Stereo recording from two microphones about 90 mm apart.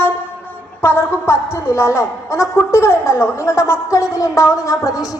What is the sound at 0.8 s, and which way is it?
A woman's voice, 25° left (ahead or behind).